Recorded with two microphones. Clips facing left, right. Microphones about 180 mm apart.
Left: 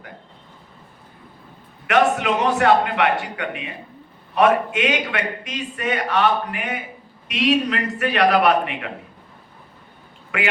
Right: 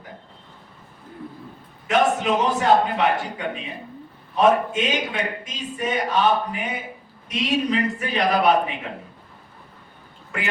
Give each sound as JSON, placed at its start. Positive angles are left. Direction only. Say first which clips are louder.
{"t": 1.9, "sound": "a man's voice", "louder": "left 1 dB", "side_deg": 70}
{"t": 10.3, "sound": "a man's voice", "louder": "left 5 dB", "side_deg": 65}